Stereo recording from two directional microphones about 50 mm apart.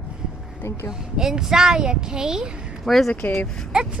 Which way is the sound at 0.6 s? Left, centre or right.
Left.